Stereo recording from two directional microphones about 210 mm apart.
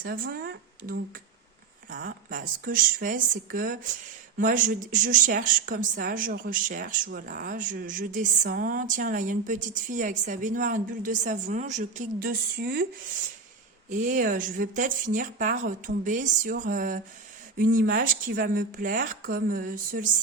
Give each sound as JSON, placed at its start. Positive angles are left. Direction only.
{"t": 0.0, "sound": "speech", "side_deg": -45}
{"t": 13.9, "sound": "speech", "side_deg": -40}